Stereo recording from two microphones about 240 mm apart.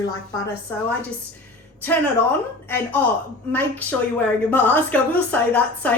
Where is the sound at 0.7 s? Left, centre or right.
Centre.